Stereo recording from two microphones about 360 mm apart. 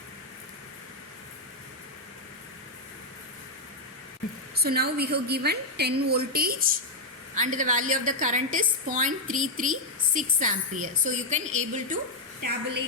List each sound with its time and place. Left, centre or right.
4.5 s a woman's voice: right